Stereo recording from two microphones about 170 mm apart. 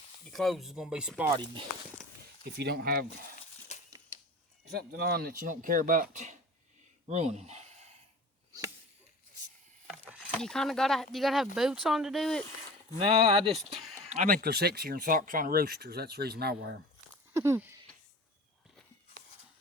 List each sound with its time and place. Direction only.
0.3 s speech: centre (ahead or behind)
2.4 s speech: 70° right (ahead or behind)
3.7 s crushing: 45° left (ahead or behind)
4.7 s speech: 65° right (ahead or behind); by 6.4 s 45° right (ahead or behind)
7.1 s a sound: 40° right (ahead or behind)
9.8 s a sound: 5° right (ahead or behind)
10.2 s speech: 5° left (ahead or behind)
13.0 s speech: 30° right (ahead or behind)
13.5 s speech: centre (ahead or behind)
14.1 s speech: 50° right (ahead or behind); by 16.7 s 70° right (ahead or behind)
17.3 s speech: 15° right (ahead or behind)